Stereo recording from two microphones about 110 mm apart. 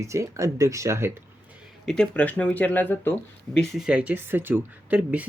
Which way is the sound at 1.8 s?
5° left (ahead or behind).